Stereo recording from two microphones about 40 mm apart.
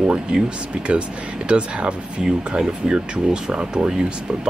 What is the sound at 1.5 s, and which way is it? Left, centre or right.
Speech, right.